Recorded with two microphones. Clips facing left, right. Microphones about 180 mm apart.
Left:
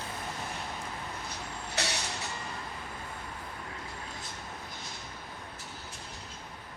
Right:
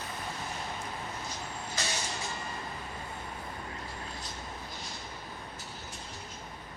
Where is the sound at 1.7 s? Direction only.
70° left (ahead or behind).